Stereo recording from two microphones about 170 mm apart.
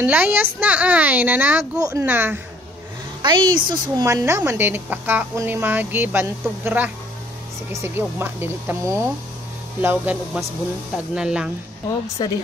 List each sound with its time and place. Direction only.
0.0 s a woman's voice: 10° right (ahead or behind)
3.2 s a woman's voice: 25° right (ahead or behind); by 11.5 s 5° right (ahead or behind)
12.2 s speech: 25° left (ahead or behind)